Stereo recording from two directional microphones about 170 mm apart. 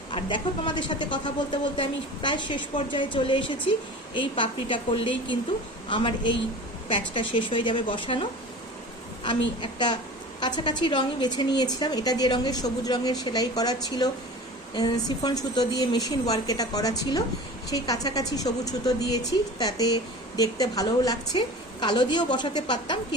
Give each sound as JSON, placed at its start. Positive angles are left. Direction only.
{"t": 0.1, "sound": "a woman's voice", "side_deg": 30}
{"t": 9.6, "sound": "a woman's voice", "side_deg": 25}